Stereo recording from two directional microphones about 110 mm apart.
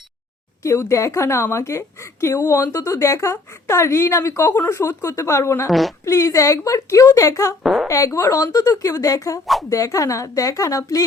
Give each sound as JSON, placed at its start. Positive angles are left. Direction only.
{"t": 0.6, "sound": "a woman's voice", "side_deg": 25}
{"t": 7.6, "sound": "a woman's voice", "side_deg": 0}
{"t": 7.9, "sound": "a woman's voice", "side_deg": 30}